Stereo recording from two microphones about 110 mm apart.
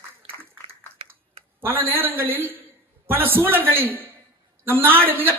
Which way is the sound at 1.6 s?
20° right (ahead or behind).